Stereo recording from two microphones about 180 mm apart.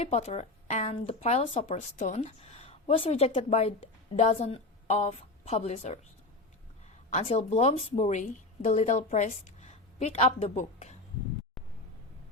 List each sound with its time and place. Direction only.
0.0 s speech: 35° left (ahead or behind)
7.2 s a woman's voice: 35° left (ahead or behind)